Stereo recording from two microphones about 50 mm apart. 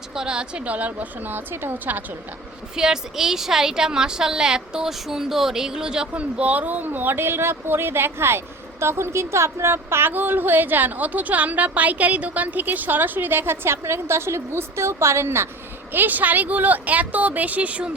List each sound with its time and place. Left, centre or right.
0.1 s speech: centre; by 2.0 s right
2.7 s a woman's voice: centre
6.1 s a woman's voice: right
8.8 s a woman's voice: right
15.9 s speech: right